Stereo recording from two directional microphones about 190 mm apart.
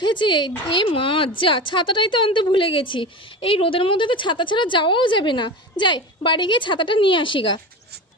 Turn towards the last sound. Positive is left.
turn(degrees=25)  # may be behind; listen again after turning